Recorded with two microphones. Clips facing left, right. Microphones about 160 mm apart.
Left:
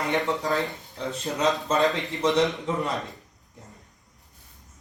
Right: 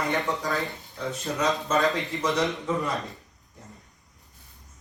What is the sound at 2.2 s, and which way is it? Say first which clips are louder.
Speech: left 5 dB; 20° left (ahead or behind).